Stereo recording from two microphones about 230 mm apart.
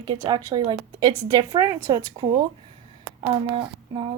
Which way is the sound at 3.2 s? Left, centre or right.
Right.